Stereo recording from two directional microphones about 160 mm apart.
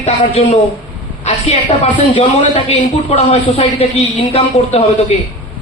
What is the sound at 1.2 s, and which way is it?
A woman's voice, 35° left (ahead or behind).